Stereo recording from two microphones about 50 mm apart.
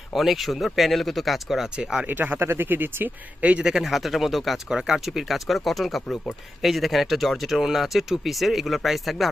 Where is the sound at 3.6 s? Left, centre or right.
Centre.